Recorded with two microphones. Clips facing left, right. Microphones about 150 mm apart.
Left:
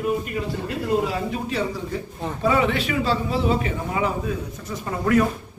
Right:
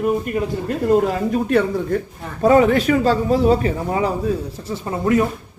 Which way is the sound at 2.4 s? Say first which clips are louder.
Right 8 dB; 45° right (ahead or behind).